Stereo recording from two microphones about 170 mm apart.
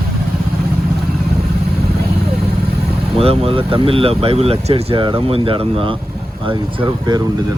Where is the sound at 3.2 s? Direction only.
35° right (ahead or behind).